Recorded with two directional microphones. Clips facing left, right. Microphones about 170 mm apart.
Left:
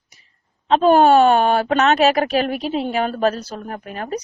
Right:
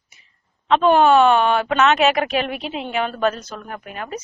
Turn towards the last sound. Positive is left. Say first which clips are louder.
# left 3 dB
turn(degrees=35)  # may be behind; listen again after turning